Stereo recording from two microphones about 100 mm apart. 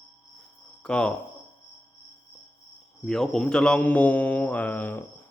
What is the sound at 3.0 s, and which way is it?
Speech, 5° left (ahead or behind).